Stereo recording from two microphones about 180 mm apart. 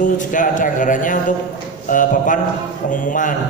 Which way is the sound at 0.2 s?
45° left (ahead or behind).